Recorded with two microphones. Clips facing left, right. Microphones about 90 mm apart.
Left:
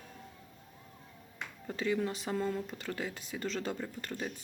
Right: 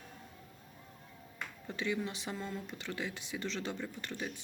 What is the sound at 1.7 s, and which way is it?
Speech, 40° left (ahead or behind).